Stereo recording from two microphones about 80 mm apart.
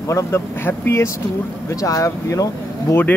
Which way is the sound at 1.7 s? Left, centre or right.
Left.